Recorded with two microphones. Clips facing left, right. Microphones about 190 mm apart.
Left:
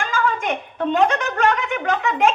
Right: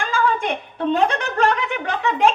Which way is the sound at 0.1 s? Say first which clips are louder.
Right 3 dB; 35° right (ahead or behind).